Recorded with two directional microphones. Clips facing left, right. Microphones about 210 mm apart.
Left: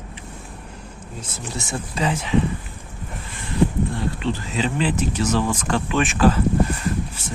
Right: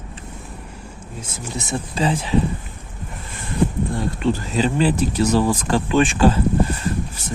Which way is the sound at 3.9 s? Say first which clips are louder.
Right 4 dB; 45° right (ahead or behind).